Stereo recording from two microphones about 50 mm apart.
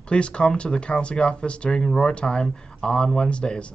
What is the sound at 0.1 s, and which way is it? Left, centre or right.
Speech, left.